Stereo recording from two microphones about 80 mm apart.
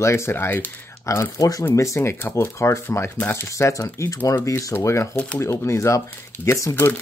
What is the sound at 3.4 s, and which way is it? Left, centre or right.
Speech, left.